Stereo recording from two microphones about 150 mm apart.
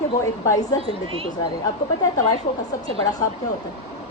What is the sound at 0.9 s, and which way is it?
Speech, 40° right (ahead or behind).